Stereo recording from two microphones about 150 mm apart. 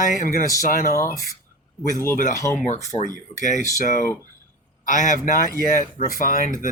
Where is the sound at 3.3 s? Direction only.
60° left (ahead or behind).